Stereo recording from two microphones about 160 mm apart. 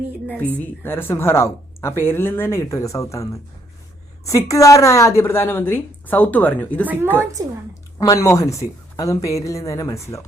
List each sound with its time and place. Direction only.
0.6 s speech: 15° left (ahead or behind)
4.3 s speech: 20° left (ahead or behind)
6.8 s a woman's voice: 10° right (ahead or behind)
7.7 s speech: 20° left (ahead or behind)